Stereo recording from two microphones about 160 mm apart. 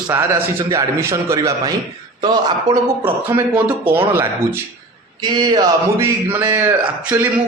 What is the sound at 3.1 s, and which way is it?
Speech, 15° right (ahead or behind).